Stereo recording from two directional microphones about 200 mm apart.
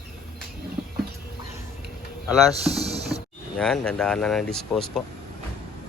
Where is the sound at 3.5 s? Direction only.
5° left (ahead or behind).